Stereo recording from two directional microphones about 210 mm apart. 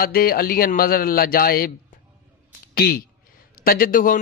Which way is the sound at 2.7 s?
50° left (ahead or behind).